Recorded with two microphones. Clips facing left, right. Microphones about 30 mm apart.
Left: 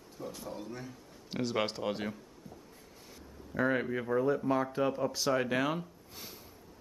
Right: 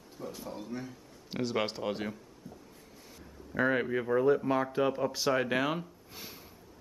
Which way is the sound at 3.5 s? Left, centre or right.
Centre.